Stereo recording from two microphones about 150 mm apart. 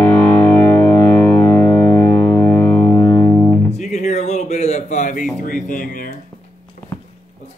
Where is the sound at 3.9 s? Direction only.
50° left (ahead or behind).